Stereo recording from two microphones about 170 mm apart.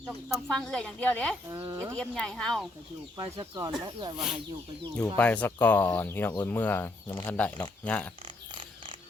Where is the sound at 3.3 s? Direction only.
25° right (ahead or behind).